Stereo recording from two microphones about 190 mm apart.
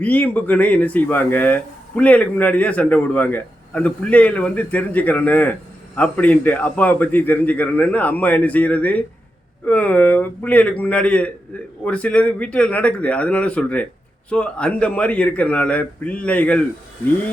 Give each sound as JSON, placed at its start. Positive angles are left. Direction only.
{"t": 0.0, "sound": "speech", "side_deg": 10}